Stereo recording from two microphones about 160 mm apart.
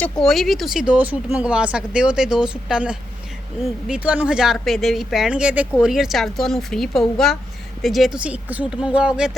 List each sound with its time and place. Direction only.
0.0 s speech: centre (ahead or behind)